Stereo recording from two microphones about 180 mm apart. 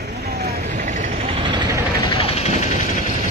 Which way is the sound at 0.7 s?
40° right (ahead or behind).